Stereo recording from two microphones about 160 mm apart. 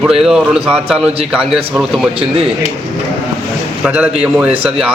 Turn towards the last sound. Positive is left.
turn(degrees=-5)  # may be behind; listen again after turning